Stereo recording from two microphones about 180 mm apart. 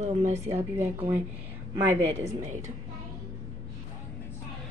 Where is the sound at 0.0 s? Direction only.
40° right (ahead or behind).